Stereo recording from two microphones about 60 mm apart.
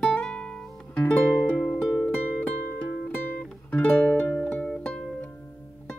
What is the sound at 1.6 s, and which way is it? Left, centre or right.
Music, centre.